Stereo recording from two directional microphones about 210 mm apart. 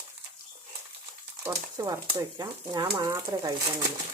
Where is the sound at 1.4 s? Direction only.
15° right (ahead or behind).